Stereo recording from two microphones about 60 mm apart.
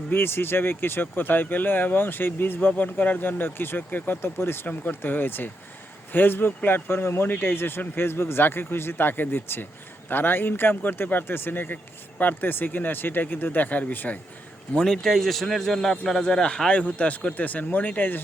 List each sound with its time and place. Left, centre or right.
0.1 s speech: left
4.2 s speech: left
14.7 s speech: centre
15.0 s speech: centre; by 18.2 s left